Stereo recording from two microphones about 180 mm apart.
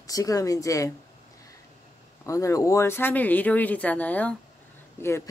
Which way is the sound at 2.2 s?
15° left (ahead or behind).